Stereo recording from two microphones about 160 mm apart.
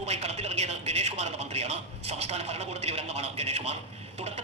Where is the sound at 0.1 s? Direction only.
40° right (ahead or behind).